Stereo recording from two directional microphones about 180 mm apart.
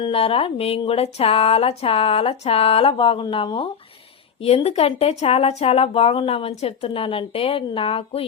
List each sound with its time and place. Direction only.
0.0 s speech: 30° left (ahead or behind)